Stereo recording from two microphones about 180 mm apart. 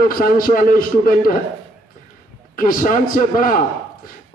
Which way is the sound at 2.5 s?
50° left (ahead or behind).